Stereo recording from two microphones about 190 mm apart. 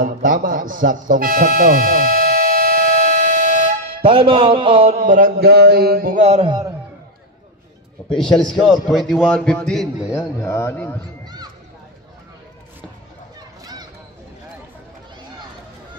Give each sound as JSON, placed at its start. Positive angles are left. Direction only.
{"t": 0.0, "sound": "music", "side_deg": -45}
{"t": 4.0, "sound": "music", "side_deg": -30}
{"t": 8.1, "sound": "a man's voice", "side_deg": 5}
{"t": 10.1, "sound": "a man's voice", "side_deg": 15}
{"t": 11.2, "sound": "a sound", "side_deg": -20}